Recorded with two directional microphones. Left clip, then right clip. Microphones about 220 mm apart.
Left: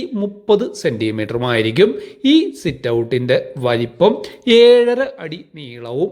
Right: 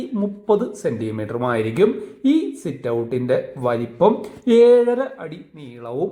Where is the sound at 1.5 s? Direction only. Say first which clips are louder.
Left 5 dB; 25° left (ahead or behind).